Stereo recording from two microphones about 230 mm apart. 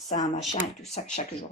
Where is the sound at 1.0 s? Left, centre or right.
Left.